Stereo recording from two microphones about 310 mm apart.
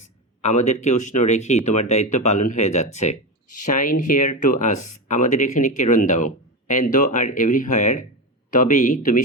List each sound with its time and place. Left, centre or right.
0.4 s speech: left